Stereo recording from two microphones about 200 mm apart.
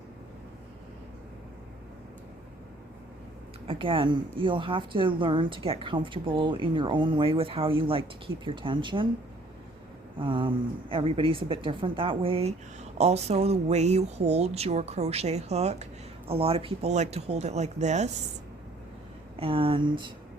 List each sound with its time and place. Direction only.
3.7 s a woman's voice: 25° right (ahead or behind)
10.2 s a woman's voice: 25° right (ahead or behind)
19.4 s a woman's voice: 25° right (ahead or behind)